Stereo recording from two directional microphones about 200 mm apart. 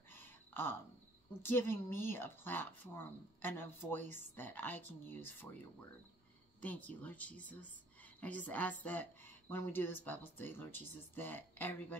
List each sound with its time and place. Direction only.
0.5 s cricket: 10° left (ahead or behind)
1.4 s speech: 10° left (ahead or behind)
6.6 s speech: 10° left (ahead or behind)